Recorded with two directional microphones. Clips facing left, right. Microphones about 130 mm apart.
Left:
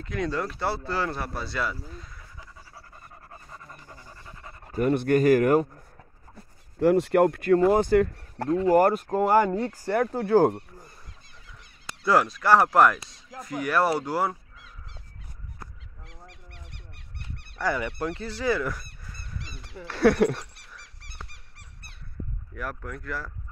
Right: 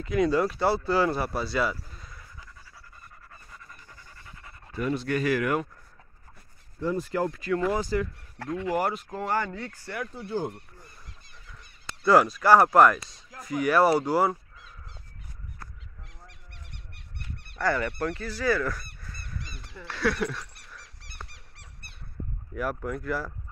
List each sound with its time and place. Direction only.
0.0 s speech: 5° right (ahead or behind)
3.3 s pant: 30° left (ahead or behind)
4.7 s speech: 50° left (ahead or behind)
6.8 s speech: 75° left (ahead or behind); by 8.5 s 50° left (ahead or behind)
8.5 s speech: 35° left (ahead or behind)
10.1 s speech: 90° left
11.8 s speech: 5° left (ahead or behind)
16.1 s goose: 90° left
17.6 s speech: 15° left (ahead or behind)
19.9 s speech: 45° left (ahead or behind)
22.5 s speech: 5° right (ahead or behind)